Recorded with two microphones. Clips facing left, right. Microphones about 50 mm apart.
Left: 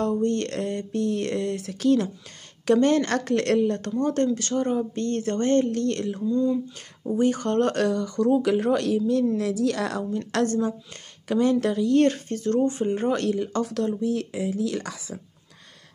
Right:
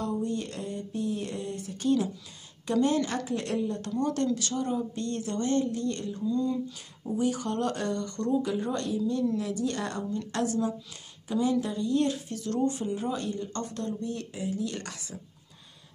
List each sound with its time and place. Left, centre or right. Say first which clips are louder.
0.0 s speech: left 7 dB; left
2.6 s speech: left 6 dB; left
4.0 s speech: left 4 dB; left
6.2 s speech: left 5 dB; left
7.2 s speech: left 7 dB; left
11.2 s speech: left 6 dB; left
13.1 s speech: left 8 dB; left